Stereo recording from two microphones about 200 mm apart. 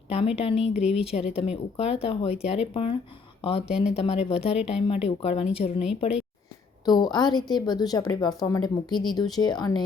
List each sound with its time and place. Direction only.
0.1 s a woman's voice: 30° left (ahead or behind)
0.7 s speech: 5° right (ahead or behind)
1.4 s a woman's voice: 30° left (ahead or behind)
6.8 s a woman's voice: 20° left (ahead or behind)